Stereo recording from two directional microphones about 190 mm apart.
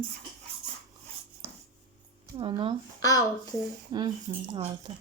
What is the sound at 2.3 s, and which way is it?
Speech, 25° right (ahead or behind).